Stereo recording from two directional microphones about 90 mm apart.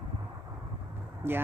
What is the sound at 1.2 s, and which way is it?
Speech, 25° right (ahead or behind).